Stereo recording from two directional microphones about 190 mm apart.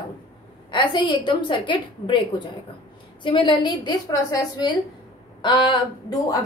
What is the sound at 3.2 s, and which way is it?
A woman's voice, 25° left (ahead or behind).